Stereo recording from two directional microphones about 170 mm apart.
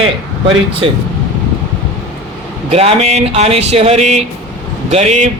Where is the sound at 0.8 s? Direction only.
30° right (ahead or behind).